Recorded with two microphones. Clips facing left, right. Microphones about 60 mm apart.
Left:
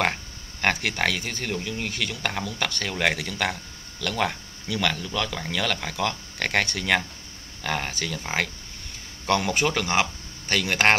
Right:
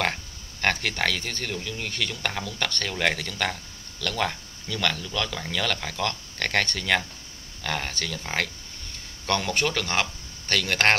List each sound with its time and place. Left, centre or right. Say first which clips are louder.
0.0 s speech: left 2 dB; centre